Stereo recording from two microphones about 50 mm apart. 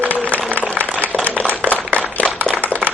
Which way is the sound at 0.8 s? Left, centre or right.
Right.